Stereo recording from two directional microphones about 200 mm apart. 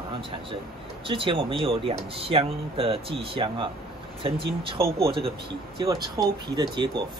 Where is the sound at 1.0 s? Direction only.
25° right (ahead or behind).